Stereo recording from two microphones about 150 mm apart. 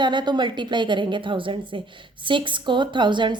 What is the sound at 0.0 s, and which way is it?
A woman's voice, 30° right (ahead or behind).